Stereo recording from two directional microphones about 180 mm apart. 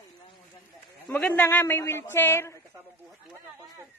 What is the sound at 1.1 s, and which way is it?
A man's voice, 10° left (ahead or behind).